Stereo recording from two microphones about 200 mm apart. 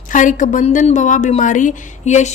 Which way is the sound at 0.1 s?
40° left (ahead or behind).